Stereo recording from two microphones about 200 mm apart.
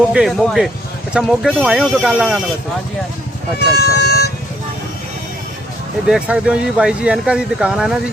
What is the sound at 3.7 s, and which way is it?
Speech, 50° left (ahead or behind).